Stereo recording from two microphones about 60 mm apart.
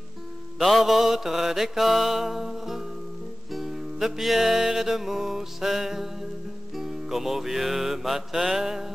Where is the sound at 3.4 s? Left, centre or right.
Centre.